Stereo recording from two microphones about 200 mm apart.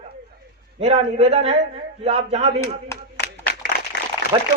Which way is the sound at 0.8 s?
30° right (ahead or behind).